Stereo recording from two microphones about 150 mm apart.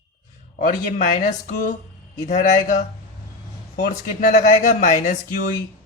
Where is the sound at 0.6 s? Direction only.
60° left (ahead or behind).